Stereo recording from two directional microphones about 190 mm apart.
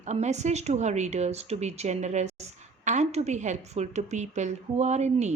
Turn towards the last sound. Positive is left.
turn(degrees=-35)  # may be behind; listen again after turning